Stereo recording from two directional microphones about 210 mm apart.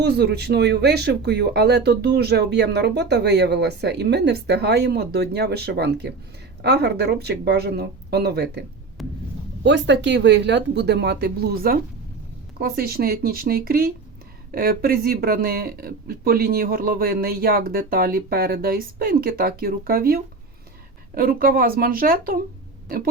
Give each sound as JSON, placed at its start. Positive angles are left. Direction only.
{"t": 0.0, "sound": "speech", "side_deg": -50}
{"t": 9.0, "sound": "heart sounds", "side_deg": 0}
{"t": 9.6, "sound": "speech", "side_deg": -55}
{"t": 21.2, "sound": "speech", "side_deg": -45}